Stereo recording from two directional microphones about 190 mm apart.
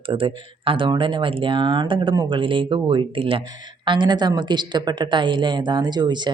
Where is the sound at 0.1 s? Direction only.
30° right (ahead or behind).